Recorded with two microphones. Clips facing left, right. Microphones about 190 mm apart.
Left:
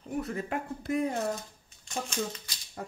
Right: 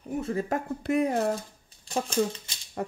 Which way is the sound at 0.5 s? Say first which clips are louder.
Right 3 dB; 40° right (ahead or behind).